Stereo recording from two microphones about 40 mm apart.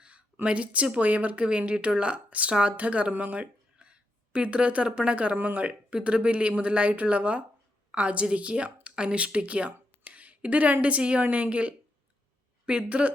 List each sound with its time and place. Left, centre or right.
0.4 s speech: right
1.5 s speech: right
3.4 s a sound: right
4.9 s speech: right